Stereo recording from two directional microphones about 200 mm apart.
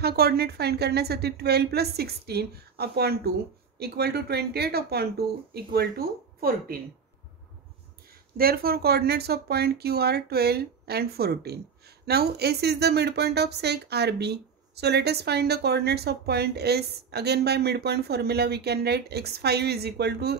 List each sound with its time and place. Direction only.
0.0 s a woman's voice: 50° right (ahead or behind)
8.4 s speech: 50° right (ahead or behind)